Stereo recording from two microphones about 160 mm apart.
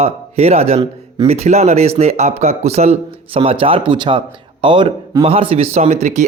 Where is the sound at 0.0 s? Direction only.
40° right (ahead or behind).